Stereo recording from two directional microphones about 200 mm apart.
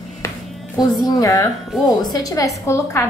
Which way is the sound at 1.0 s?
20° left (ahead or behind).